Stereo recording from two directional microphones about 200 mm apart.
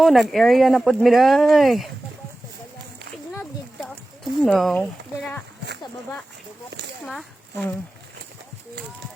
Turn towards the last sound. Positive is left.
turn(degrees=0)  # may be behind; listen again after turning